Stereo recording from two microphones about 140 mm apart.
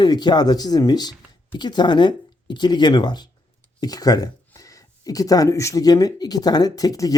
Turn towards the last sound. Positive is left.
turn(degrees=25)  # may be behind; listen again after turning